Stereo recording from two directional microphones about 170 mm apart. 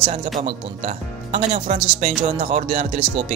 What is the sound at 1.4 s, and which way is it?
Speech, 35° right (ahead or behind).